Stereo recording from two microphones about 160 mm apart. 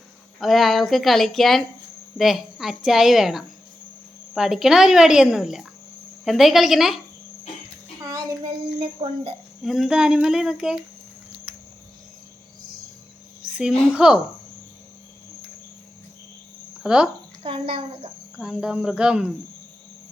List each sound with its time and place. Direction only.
0.3 s a woman's voice: centre (ahead or behind)
8.8 s a child's voice: 35° right (ahead or behind)
9.6 s a woman's voice: centre (ahead or behind)
13.4 s a sound: 5° right (ahead or behind)
13.9 s a woman's voice: 5° right (ahead or behind)
16.8 s speech: 5° right (ahead or behind)
17.4 s a child's voice: 35° right (ahead or behind)
18.3 s a woman's voice: 5° right (ahead or behind)